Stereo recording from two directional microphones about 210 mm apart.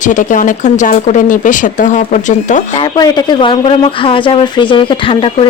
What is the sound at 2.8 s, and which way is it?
Speech, 20° left (ahead or behind).